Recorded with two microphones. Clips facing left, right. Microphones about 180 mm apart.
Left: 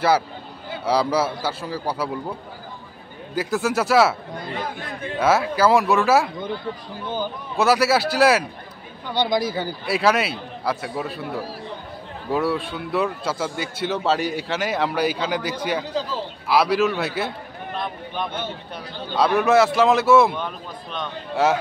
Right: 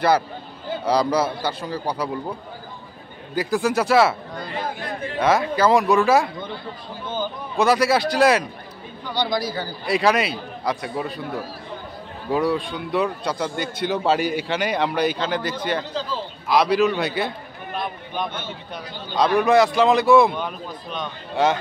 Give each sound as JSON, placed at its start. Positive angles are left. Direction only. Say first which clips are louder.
{"t": 0.8, "sound": "a man's voice", "louder": "even", "side_deg": 5}
{"t": 3.3, "sound": "a man's voice", "louder": "right 1 dB", "side_deg": 0}
{"t": 5.2, "sound": "a man's voice", "louder": "even", "side_deg": 5}
{"t": 7.5, "sound": "a man's voice", "louder": "even", "side_deg": 5}
{"t": 9.1, "sound": "a man's voice", "louder": "left 2 dB", "side_deg": 25}
{"t": 9.8, "sound": "a man's voice", "louder": "right 1 dB", "side_deg": 5}
{"t": 12.3, "sound": "a man's voice", "louder": "right 1 dB", "side_deg": 5}